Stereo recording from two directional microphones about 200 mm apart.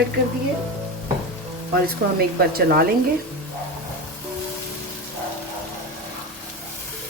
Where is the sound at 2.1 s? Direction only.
50° right (ahead or behind).